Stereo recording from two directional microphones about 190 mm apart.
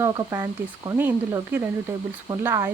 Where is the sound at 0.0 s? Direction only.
15° right (ahead or behind).